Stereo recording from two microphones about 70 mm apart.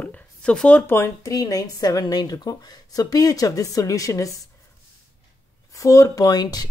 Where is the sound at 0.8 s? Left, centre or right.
Left.